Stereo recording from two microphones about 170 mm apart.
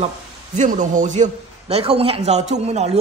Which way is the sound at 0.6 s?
50° right (ahead or behind).